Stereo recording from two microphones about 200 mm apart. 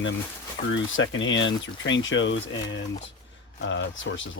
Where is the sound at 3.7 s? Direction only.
70° left (ahead or behind).